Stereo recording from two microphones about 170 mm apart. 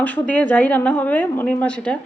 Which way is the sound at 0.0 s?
10° left (ahead or behind).